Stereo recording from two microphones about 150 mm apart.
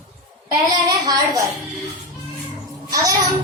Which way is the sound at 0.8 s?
25° right (ahead or behind).